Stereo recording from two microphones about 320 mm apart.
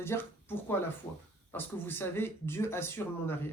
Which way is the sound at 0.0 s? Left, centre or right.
Centre.